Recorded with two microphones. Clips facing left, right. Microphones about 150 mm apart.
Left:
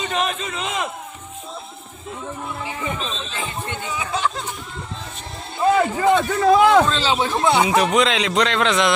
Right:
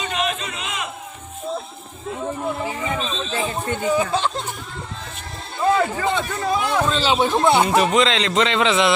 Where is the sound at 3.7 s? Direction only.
35° right (ahead or behind).